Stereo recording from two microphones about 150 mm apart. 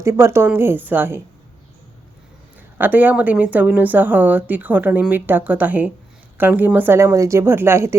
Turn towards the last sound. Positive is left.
turn(degrees=-15)  # may be behind; listen again after turning